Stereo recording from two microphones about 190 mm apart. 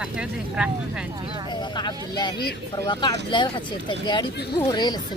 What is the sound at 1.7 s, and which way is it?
Speech, 20° left (ahead or behind).